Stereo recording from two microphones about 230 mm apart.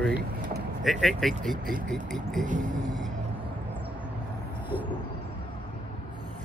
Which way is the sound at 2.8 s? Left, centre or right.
Centre.